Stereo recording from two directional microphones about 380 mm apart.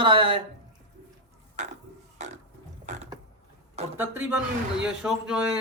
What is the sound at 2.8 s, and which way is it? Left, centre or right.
Mechanisms, centre.